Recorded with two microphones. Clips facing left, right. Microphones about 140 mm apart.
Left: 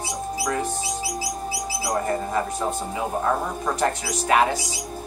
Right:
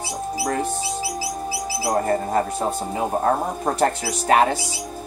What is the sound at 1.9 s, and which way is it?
Speech, 40° right (ahead or behind).